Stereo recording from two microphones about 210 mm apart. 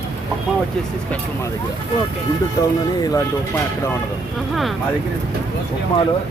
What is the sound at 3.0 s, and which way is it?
Speech, 15° left (ahead or behind).